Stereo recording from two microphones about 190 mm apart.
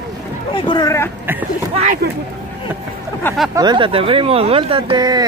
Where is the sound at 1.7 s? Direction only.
35° right (ahead or behind).